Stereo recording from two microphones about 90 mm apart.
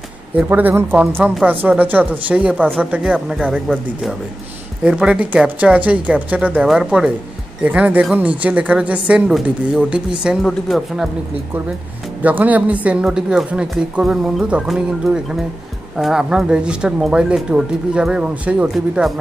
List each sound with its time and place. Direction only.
0.4 s speech: 20° right (ahead or behind)
3.6 s speech: centre (ahead or behind)
4.8 s speech: 10° right (ahead or behind)
6.6 s speech: 5° right (ahead or behind)
10.4 s speech: centre (ahead or behind)
12.2 s speech: 15° right (ahead or behind)
18.7 s speech: centre (ahead or behind)